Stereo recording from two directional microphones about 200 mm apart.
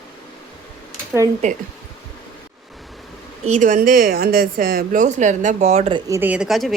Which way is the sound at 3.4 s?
40° right (ahead or behind).